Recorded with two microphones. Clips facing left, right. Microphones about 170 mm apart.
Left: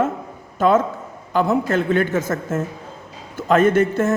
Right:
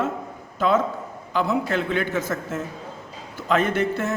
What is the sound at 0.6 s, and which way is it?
A man's voice, 45° left (ahead or behind).